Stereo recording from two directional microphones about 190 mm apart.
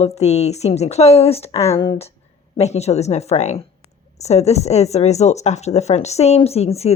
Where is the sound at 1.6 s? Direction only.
15° left (ahead or behind).